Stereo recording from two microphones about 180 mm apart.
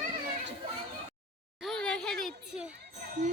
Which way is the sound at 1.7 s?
5° left (ahead or behind).